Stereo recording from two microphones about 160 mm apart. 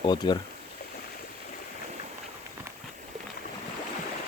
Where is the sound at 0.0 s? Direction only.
25° left (ahead or behind).